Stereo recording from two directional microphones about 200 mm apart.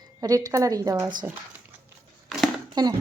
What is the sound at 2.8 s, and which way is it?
Speech, 20° right (ahead or behind).